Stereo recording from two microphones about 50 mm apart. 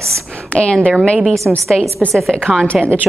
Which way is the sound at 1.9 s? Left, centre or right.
Centre.